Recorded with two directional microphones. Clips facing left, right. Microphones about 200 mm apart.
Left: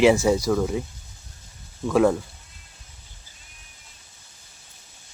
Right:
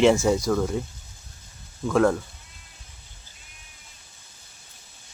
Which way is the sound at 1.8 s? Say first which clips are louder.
Left 1 dB; 5° left (ahead or behind).